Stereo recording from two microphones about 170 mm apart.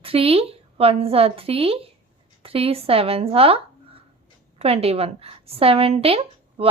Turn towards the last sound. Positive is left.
turn(degrees=-35)  # may be behind; listen again after turning